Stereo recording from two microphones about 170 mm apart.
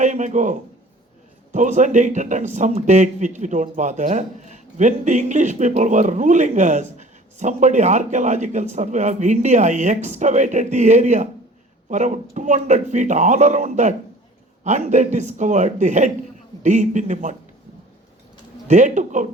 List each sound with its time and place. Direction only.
0.0 s a man's voice: 45° right (ahead or behind)
18.7 s speech: 45° right (ahead or behind)